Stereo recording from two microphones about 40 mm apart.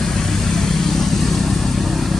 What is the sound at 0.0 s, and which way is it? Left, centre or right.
Vehicle, centre.